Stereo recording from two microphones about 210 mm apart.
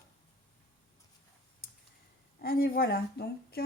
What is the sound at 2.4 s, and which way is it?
Speech, 45° left (ahead or behind).